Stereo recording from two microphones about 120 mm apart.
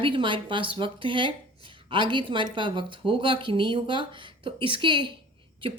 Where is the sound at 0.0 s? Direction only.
45° right (ahead or behind).